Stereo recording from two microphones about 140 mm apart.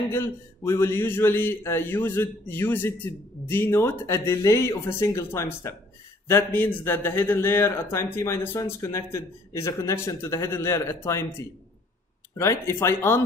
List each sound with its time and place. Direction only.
0.1 s a man's voice: 20° left (ahead or behind)